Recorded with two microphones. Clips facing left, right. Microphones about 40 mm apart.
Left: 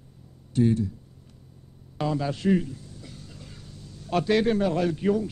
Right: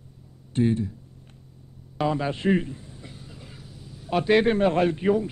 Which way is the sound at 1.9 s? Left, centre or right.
Right.